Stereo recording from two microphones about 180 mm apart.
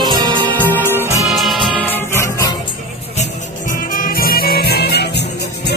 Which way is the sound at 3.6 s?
50° left (ahead or behind).